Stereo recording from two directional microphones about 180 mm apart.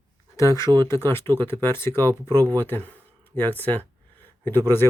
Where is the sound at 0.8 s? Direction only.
15° left (ahead or behind).